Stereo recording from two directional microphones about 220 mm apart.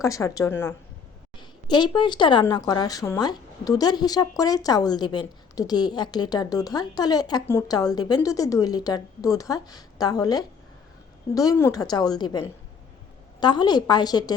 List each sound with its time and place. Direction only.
0.0 s a woman's voice: 15° left (ahead or behind)